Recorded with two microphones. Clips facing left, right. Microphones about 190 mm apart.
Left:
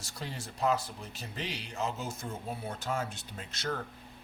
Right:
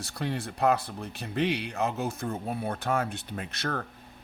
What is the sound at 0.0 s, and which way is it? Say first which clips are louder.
Speech: right 9 dB; 60° right (ahead or behind).